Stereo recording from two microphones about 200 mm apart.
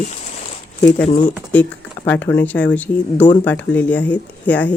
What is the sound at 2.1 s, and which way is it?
Speech, 10° left (ahead or behind).